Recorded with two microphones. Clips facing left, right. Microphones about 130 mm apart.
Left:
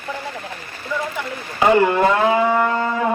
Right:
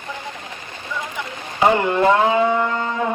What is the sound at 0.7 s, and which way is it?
Speech, 20° right (ahead or behind).